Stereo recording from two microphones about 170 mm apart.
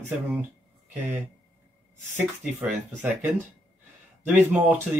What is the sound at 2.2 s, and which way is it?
Speech, 5° right (ahead or behind).